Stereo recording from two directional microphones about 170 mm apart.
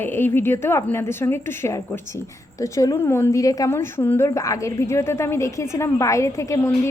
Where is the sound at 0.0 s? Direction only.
10° left (ahead or behind).